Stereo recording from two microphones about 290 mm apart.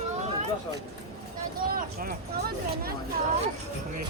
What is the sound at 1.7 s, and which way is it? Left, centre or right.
Speech, right.